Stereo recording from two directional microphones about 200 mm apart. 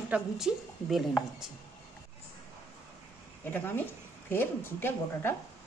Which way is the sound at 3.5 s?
10° left (ahead or behind).